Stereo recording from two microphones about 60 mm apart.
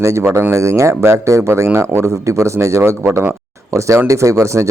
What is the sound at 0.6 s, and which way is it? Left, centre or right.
Speech, right.